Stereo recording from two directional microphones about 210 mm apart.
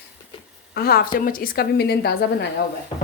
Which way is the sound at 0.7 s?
45° left (ahead or behind).